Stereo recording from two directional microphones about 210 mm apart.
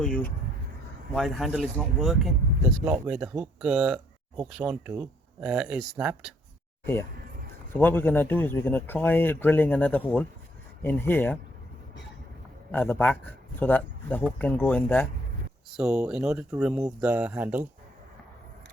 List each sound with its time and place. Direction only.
0.0 s speech: 5° left (ahead or behind)
7.7 s speech: 10° left (ahead or behind)
12.7 s speech: 10° left (ahead or behind)
15.7 s speech: 5° right (ahead or behind)